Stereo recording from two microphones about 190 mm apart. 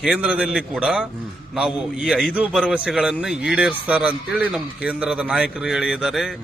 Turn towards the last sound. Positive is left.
turn(degrees=0)  # may be behind; listen again after turning